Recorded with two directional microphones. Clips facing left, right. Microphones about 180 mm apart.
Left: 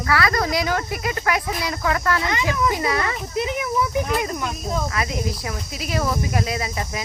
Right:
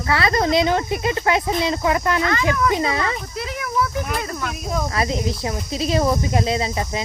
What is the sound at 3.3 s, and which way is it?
Speech, 20° left (ahead or behind).